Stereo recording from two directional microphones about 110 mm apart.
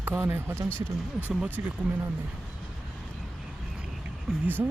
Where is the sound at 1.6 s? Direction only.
20° right (ahead or behind).